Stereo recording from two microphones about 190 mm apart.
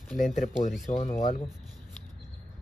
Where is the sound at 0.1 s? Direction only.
Centre (ahead or behind).